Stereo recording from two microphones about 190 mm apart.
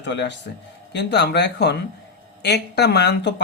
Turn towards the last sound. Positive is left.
turn(degrees=60)  # may be behind; listen again after turning